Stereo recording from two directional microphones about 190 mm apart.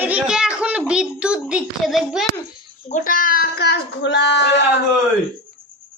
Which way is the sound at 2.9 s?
45° left (ahead or behind).